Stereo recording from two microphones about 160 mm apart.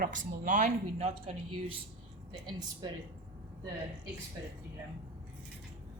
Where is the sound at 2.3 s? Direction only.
25° right (ahead or behind).